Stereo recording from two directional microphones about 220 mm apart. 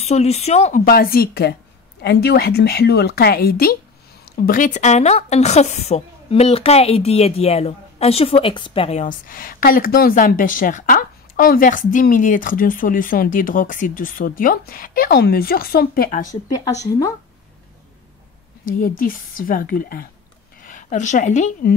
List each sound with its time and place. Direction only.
0.0 s speech: 30° left (ahead or behind)
0.8 s a woman's voice: 45° left (ahead or behind)
16.3 s speech: 15° left (ahead or behind)
18.7 s a woman's voice: 40° left (ahead or behind)